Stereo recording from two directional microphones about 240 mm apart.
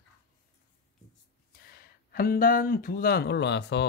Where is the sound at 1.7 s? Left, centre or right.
Left.